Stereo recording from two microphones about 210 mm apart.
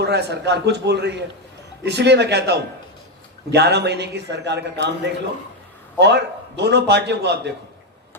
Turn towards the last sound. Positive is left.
turn(degrees=-55)  # may be behind; listen again after turning